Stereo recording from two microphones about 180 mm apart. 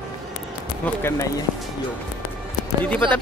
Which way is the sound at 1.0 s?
15° left (ahead or behind).